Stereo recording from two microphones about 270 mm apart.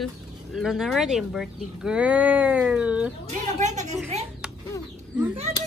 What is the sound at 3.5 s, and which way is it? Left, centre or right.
Speech, right.